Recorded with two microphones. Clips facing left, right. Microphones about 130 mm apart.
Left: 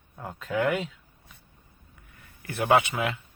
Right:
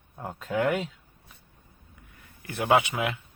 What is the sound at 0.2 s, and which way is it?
Speech, 5° right (ahead or behind).